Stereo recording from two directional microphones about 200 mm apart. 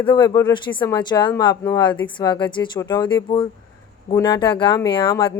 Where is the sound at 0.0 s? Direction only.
25° left (ahead or behind).